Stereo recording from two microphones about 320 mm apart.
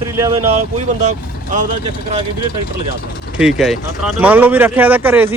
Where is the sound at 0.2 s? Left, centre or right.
Centre.